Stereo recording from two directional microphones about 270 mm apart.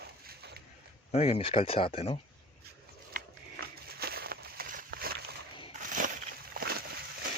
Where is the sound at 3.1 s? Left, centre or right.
Right.